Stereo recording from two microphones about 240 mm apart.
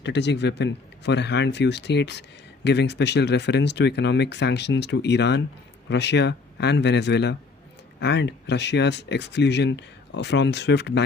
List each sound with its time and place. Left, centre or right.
0.0 s speech: left